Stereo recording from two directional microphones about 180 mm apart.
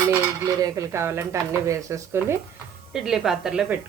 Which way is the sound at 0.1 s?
20° right (ahead or behind).